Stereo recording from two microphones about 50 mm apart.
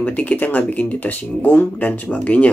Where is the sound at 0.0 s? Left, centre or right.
Left.